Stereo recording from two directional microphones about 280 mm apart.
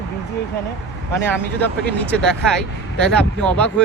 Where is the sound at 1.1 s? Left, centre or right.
Centre.